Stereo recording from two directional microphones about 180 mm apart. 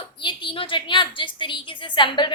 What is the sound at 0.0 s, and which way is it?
A woman's voice, 25° left (ahead or behind).